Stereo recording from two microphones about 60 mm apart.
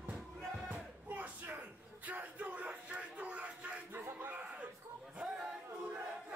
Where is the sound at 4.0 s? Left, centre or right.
Right.